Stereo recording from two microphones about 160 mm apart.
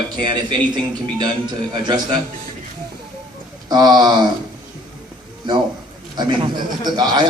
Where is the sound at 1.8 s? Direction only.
25° right (ahead or behind).